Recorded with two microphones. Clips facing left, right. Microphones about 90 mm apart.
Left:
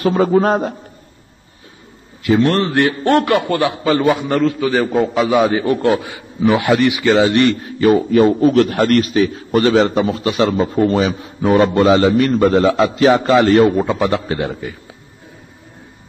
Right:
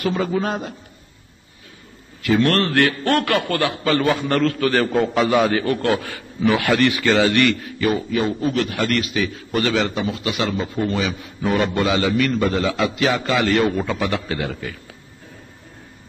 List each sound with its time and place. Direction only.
0.0 s a man's voice: 35° left (ahead or behind)
2.2 s a man's voice: 20° left (ahead or behind)
4.9 s a man's voice: centre (ahead or behind)
5.3 s a man's voice: 15° left (ahead or behind)